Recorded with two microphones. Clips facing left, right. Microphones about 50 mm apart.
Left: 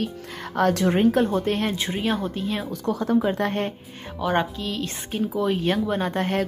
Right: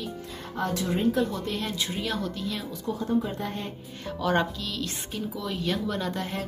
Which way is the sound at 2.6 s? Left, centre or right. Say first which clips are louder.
Left 6 dB; left.